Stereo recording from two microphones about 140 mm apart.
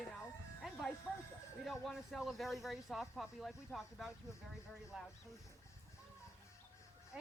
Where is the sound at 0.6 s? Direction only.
Centre (ahead or behind).